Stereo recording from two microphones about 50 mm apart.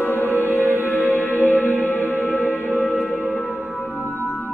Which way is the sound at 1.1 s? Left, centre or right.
Left.